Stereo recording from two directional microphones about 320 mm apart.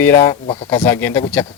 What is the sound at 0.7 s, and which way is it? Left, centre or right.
Speech, centre.